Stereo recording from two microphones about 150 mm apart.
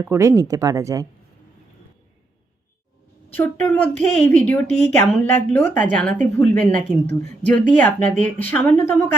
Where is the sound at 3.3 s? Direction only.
15° left (ahead or behind).